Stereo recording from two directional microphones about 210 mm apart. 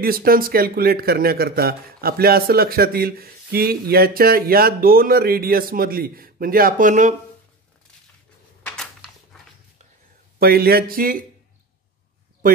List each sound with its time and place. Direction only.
0.0 s speech: 45° right (ahead or behind)
8.6 s a sound: 5° left (ahead or behind)
10.4 s speech: 45° right (ahead or behind)